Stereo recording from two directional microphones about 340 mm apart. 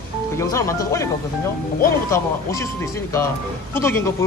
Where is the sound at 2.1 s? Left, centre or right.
Centre.